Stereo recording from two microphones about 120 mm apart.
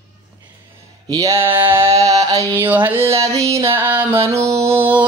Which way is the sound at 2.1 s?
30° right (ahead or behind).